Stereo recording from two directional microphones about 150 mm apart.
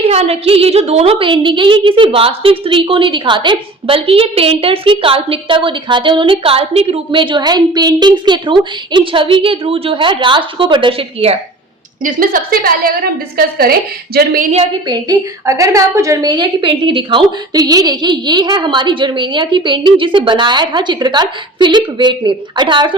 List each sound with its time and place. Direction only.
0.1 s a woman's voice: 45° right (ahead or behind)
12.0 s a woman's voice: 70° right (ahead or behind)
13.3 s a woman's voice: 90° right
14.8 s a woman's voice: 25° right (ahead or behind)